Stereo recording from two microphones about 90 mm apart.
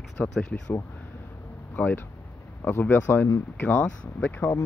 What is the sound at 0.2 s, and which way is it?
Speech, 15° left (ahead or behind).